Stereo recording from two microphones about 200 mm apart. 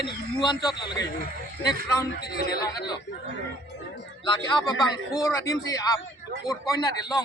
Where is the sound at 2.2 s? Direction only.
50° left (ahead or behind).